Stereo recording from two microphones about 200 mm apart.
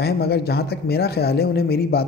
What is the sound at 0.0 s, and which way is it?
Speech, 50° left (ahead or behind).